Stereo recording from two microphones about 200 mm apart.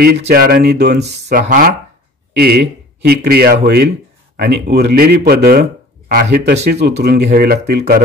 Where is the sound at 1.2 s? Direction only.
45° right (ahead or behind).